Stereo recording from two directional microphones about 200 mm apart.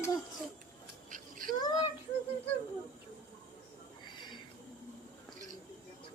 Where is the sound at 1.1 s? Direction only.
45° right (ahead or behind).